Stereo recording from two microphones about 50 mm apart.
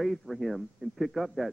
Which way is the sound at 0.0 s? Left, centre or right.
Centre.